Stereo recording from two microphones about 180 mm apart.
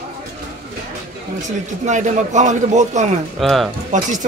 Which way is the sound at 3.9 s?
45° right (ahead or behind).